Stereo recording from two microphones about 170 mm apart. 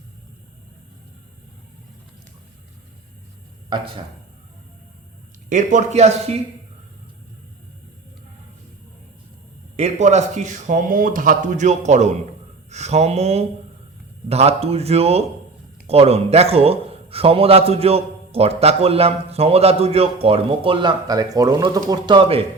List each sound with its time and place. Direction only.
3.7 s speech: 25° right (ahead or behind)
5.5 s a man's voice: 45° right (ahead or behind)
9.7 s a man's voice: 40° right (ahead or behind)